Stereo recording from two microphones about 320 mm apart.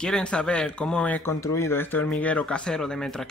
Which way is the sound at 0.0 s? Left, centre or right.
Centre.